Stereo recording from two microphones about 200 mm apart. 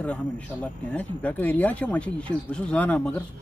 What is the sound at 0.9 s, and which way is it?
Speech, 10° left (ahead or behind).